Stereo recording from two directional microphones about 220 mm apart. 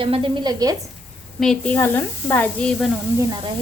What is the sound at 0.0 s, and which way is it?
Speech, 20° right (ahead or behind).